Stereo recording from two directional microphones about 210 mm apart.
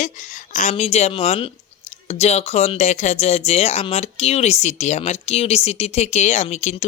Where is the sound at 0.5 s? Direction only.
35° left (ahead or behind).